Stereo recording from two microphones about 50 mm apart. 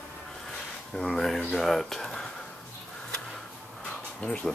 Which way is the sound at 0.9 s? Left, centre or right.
Centre.